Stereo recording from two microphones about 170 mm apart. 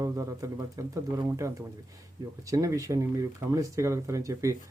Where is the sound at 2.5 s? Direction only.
20° right (ahead or behind).